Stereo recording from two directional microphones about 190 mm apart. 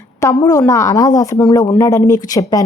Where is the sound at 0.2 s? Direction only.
20° left (ahead or behind).